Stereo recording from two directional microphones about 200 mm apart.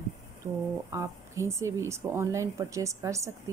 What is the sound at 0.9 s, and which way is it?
Speech, 15° right (ahead or behind).